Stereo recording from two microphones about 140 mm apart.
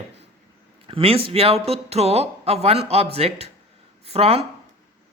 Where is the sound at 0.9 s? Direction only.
40° right (ahead or behind).